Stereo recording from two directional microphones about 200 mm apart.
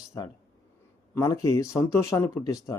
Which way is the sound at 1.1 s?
15° left (ahead or behind).